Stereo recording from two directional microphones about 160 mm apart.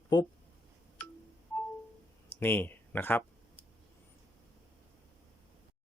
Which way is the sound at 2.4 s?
15° left (ahead or behind).